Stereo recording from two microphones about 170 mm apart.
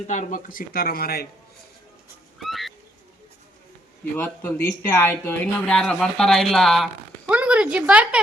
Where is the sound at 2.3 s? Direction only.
Centre (ahead or behind).